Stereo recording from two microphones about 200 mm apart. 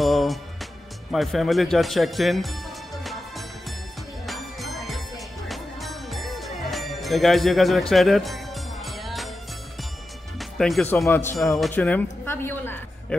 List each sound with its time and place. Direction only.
0.0 s music: centre (ahead or behind)
1.1 s speech: centre (ahead or behind)
4.3 s music: centre (ahead or behind)
10.4 s speech: centre (ahead or behind)